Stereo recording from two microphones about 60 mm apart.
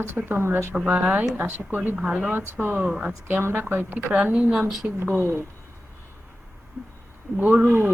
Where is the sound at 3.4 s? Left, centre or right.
Right.